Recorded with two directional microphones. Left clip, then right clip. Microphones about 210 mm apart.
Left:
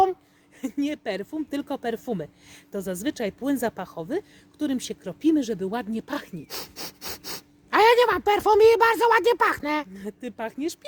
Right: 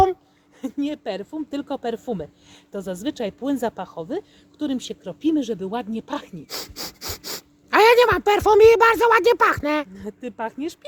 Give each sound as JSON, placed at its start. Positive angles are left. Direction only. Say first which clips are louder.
{"t": 0.6, "sound": "speech", "louder": "right 1 dB", "side_deg": 35}
{"t": 6.5, "sound": "speech", "louder": "right 6 dB", "side_deg": -10}
{"t": 9.9, "sound": "speech", "louder": "right 2 dB", "side_deg": 35}